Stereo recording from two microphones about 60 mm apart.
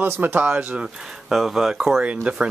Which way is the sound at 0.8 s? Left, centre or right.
Centre.